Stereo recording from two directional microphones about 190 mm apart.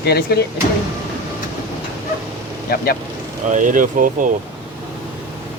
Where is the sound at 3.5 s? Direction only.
45° right (ahead or behind).